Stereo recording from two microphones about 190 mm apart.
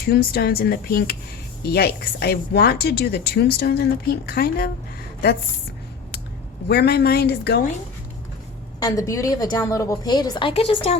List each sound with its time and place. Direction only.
0.0 s speech: 55° left (ahead or behind)
6.7 s speech: 60° left (ahead or behind)
8.8 s a woman's voice: 20° left (ahead or behind)